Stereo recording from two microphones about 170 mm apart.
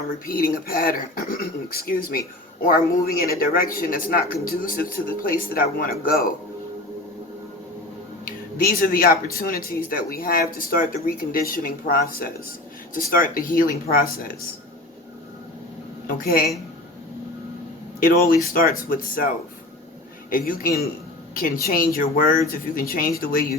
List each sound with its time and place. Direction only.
0.3 s speech: 55° left (ahead or behind)
8.2 s speech: 55° left (ahead or behind)
16.0 s speech: 60° left (ahead or behind)
18.5 s speech: 55° left (ahead or behind)
20.3 s speech: 55° left (ahead or behind)